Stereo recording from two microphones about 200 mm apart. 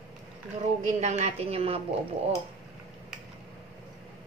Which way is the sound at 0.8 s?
35° right (ahead or behind).